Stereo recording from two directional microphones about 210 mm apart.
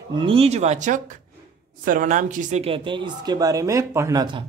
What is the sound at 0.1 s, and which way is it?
Speech, 25° right (ahead or behind).